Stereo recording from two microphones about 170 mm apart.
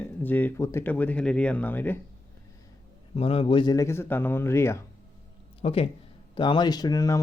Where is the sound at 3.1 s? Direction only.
35° left (ahead or behind); by 4.8 s 15° left (ahead or behind).